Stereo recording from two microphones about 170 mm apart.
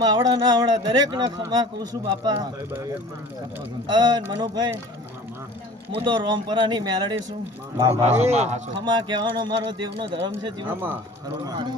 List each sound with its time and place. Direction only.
0.0 s speech: 25° right (ahead or behind)
5.9 s speech: 30° right (ahead or behind)
8.2 s speech: 40° right (ahead or behind)
8.8 s speech: 25° right (ahead or behind)
10.7 s speech: 10° right (ahead or behind)
11.4 s speech: 25° right (ahead or behind)